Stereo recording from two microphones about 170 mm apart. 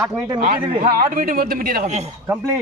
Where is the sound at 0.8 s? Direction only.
55° right (ahead or behind).